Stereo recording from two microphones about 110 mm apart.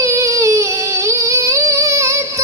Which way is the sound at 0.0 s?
30° right (ahead or behind).